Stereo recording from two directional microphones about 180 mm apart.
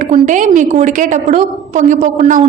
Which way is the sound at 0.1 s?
45° right (ahead or behind).